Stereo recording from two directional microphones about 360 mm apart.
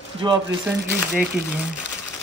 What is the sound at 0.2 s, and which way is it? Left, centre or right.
Speech, centre.